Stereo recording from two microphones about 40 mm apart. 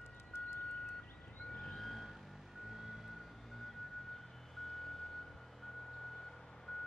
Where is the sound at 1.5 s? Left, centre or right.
Centre.